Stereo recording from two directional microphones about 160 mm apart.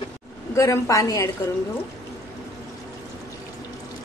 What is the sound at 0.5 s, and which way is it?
Speech, 20° left (ahead or behind).